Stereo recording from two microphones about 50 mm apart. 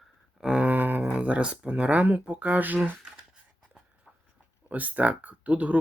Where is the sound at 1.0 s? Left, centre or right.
Right.